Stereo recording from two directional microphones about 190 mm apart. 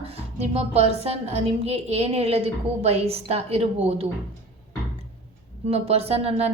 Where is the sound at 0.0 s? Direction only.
30° right (ahead or behind).